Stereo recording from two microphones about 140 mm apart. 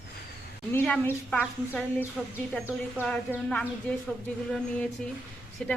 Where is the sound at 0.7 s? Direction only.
10° left (ahead or behind).